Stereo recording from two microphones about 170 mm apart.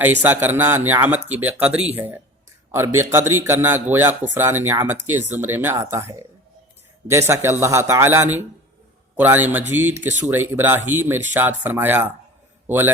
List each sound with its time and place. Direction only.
0.0 s a man's voice: 10° right (ahead or behind)